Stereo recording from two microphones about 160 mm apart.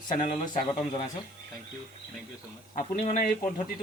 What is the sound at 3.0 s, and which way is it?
Speech, 45° left (ahead or behind).